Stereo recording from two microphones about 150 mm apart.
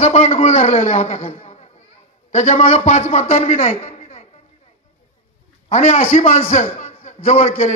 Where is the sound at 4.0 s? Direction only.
45° left (ahead or behind).